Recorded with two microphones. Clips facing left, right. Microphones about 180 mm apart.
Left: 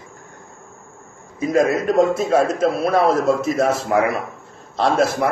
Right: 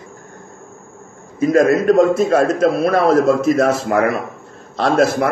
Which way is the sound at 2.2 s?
60° right (ahead or behind).